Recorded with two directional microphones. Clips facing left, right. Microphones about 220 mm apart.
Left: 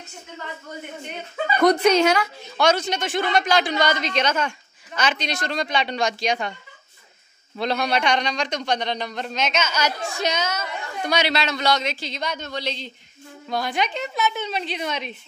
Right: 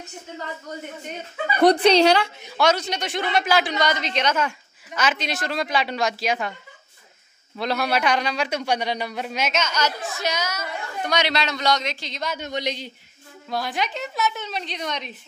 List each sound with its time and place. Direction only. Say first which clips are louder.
1.6 s speech: right 1 dB; 35° right (ahead or behind)
2.5 s speech: left 1 dB; centre (ahead or behind)
7.6 s a man's voice: even; 5° right (ahead or behind)
9.6 s speech: even; 10° left (ahead or behind)
10.3 s a woman's voice: left 2 dB; 25° left (ahead or behind)
11.1 s speech: left 1 dB; 5° left (ahead or behind)
12.4 s a man's voice: right 2 dB; 15° right (ahead or behind)
13.5 s speech: left 2 dB; centre (ahead or behind)